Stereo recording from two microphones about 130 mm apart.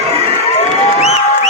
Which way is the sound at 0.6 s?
55° left (ahead or behind).